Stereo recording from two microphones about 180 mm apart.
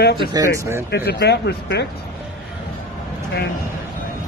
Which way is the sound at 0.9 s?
65° left (ahead or behind).